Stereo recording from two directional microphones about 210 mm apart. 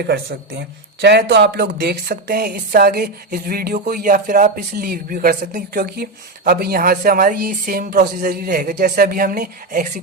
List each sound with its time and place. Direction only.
0.0 s speech: 50° right (ahead or behind)